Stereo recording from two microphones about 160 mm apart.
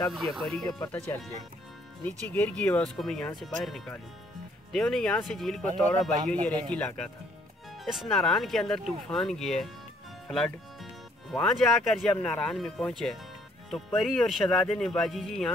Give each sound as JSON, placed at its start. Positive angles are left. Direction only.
{"t": 0.1, "sound": "speech", "side_deg": 0}
{"t": 0.7, "sound": "speech", "side_deg": 25}
{"t": 2.0, "sound": "speech", "side_deg": 10}